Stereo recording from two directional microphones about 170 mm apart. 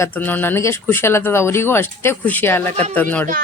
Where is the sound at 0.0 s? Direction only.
10° left (ahead or behind).